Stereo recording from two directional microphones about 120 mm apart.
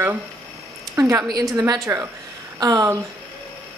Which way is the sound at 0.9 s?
25° right (ahead or behind).